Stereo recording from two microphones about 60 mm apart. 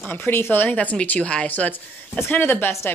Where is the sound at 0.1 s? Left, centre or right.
Left.